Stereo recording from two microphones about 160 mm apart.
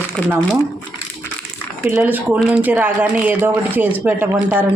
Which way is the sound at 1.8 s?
10° right (ahead or behind).